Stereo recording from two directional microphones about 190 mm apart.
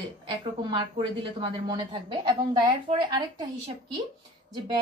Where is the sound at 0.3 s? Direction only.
25° right (ahead or behind).